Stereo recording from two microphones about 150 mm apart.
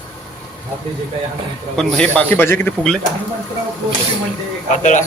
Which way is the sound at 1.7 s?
5° left (ahead or behind).